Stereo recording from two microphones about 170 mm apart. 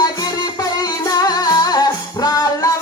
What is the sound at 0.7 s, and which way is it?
Music, 20° left (ahead or behind).